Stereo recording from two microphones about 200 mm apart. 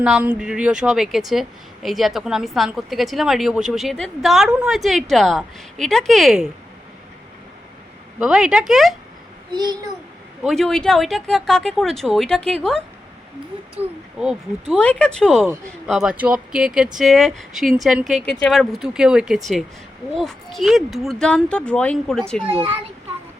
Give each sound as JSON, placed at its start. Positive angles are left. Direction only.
{"t": 0.0, "sound": "a woman's voice", "side_deg": -5}
{"t": 8.2, "sound": "a woman's voice", "side_deg": -5}
{"t": 9.5, "sound": "a child's voice", "side_deg": -20}
{"t": 10.4, "sound": "a woman's voice", "side_deg": 0}
{"t": 14.8, "sound": "a woman's voice", "side_deg": 5}